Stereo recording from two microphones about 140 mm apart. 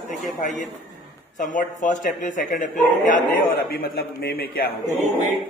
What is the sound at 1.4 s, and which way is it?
Speech, 65° left (ahead or behind).